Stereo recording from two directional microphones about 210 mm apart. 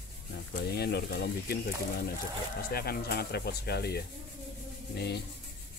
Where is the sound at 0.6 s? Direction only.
50° left (ahead or behind).